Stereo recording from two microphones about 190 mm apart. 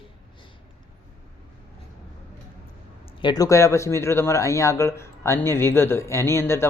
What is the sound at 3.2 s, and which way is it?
Speech, 20° left (ahead or behind).